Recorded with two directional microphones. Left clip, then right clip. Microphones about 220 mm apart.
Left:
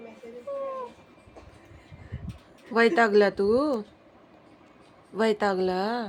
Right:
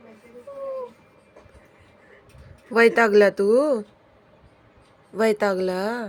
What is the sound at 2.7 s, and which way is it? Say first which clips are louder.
Speech: right 4 dB; 15° right (ahead or behind).